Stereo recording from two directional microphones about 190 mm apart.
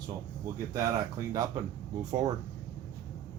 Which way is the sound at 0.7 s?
15° right (ahead or behind).